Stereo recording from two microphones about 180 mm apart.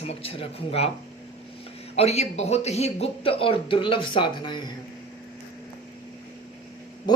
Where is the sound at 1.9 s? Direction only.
35° left (ahead or behind).